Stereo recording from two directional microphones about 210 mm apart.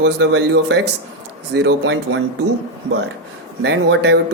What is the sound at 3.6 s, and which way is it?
Speech, 55° right (ahead or behind).